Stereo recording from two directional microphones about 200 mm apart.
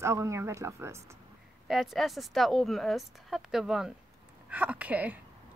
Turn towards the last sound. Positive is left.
turn(degrees=-10)  # may be behind; listen again after turning